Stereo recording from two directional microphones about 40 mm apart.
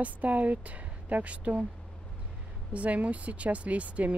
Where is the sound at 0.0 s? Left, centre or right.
Right.